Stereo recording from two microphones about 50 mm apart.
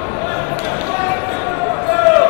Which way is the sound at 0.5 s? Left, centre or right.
Left.